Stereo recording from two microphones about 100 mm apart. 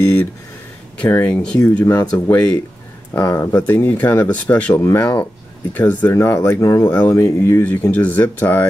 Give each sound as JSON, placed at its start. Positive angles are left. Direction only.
{"t": 1.2, "sound": "speech", "side_deg": 10}
{"t": 2.1, "sound": "speech", "side_deg": 25}
{"t": 4.7, "sound": "speech", "side_deg": 25}